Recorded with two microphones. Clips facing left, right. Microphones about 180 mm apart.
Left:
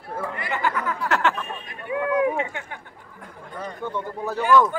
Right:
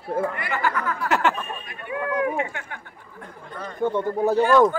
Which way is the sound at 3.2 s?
10° left (ahead or behind).